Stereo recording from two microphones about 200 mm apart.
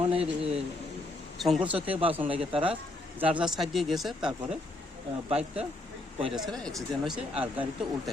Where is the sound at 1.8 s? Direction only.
30° right (ahead or behind).